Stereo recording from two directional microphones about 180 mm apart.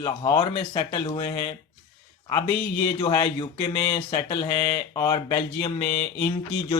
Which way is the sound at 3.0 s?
25° left (ahead or behind).